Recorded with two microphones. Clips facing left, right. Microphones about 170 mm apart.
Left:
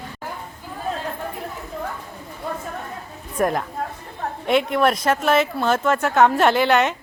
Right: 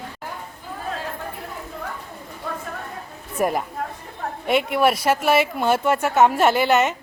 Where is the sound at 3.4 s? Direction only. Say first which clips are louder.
Left 1 dB; 5° right (ahead or behind).